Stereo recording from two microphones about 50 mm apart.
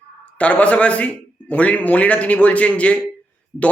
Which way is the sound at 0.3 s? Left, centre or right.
Left.